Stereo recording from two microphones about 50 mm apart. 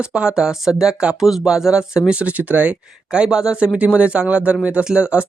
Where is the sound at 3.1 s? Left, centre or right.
Centre.